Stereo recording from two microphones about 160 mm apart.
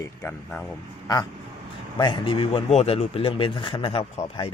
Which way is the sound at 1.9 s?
30° left (ahead or behind).